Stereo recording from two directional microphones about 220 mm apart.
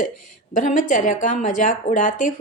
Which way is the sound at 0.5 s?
35° left (ahead or behind).